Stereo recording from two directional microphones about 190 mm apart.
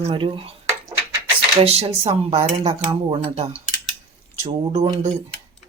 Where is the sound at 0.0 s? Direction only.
25° right (ahead or behind).